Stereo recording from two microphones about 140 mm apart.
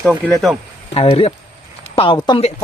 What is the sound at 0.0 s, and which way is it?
Speech, centre (ahead or behind).